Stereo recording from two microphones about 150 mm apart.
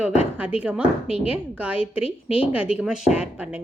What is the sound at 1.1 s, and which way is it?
Speech, 40° left (ahead or behind).